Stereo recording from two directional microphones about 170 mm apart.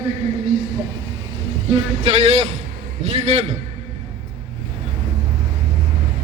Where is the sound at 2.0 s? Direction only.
40° right (ahead or behind).